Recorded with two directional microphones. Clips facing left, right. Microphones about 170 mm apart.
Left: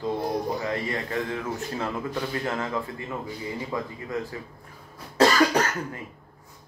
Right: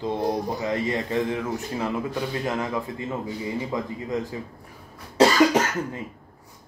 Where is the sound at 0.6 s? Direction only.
20° right (ahead or behind).